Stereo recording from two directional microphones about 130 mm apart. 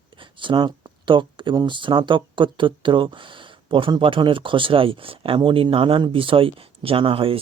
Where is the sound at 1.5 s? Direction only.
35° right (ahead or behind).